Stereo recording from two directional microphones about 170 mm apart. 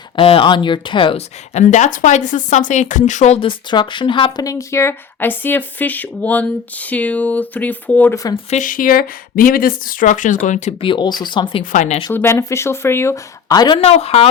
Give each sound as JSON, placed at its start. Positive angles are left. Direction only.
{"t": 0.2, "sound": "speech", "side_deg": 30}
{"t": 8.4, "sound": "speech", "side_deg": 50}
{"t": 11.6, "sound": "speech", "side_deg": 45}
{"t": 12.1, "sound": "speech", "side_deg": 15}
{"t": 13.8, "sound": "speech", "side_deg": 35}